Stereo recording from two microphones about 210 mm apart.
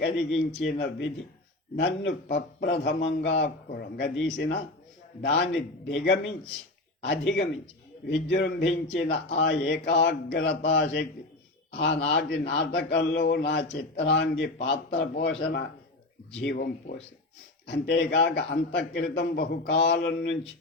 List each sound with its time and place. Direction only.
0.0 s a man's voice: 50° left (ahead or behind)
16.4 s a man's voice: 55° left (ahead or behind)
17.7 s a man's voice: 50° left (ahead or behind)